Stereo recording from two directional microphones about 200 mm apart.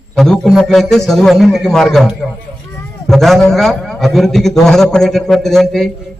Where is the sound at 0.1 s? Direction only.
5° left (ahead or behind).